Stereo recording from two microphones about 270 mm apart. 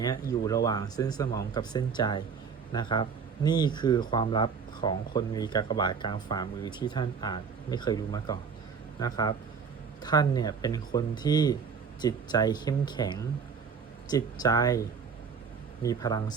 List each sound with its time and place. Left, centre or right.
0.0 s speech: centre
15.8 s speech: centre